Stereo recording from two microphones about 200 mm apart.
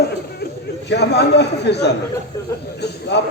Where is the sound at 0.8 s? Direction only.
55° left (ahead or behind).